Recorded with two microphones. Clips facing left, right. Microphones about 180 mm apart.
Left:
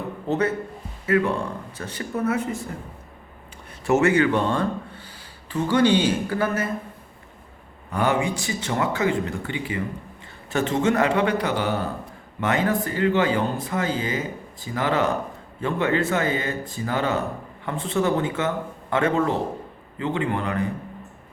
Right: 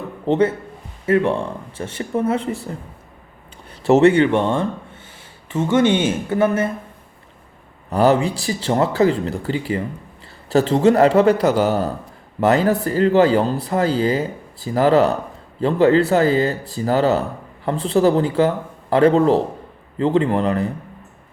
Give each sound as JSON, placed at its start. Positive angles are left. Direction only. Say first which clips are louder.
{"t": 0.3, "sound": "speech", "louder": "right 6 dB", "side_deg": -25}
{"t": 3.8, "sound": "speech", "louder": "right 6 dB", "side_deg": -35}
{"t": 7.9, "sound": "speech", "louder": "right 7 dB", "side_deg": -35}